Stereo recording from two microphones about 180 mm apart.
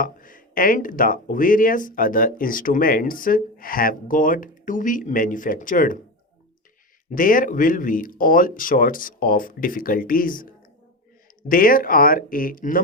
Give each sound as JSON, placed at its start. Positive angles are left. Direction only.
{"t": 0.0, "sound": "speech", "side_deg": 50}
{"t": 7.1, "sound": "speech", "side_deg": 50}
{"t": 11.4, "sound": "speech", "side_deg": 50}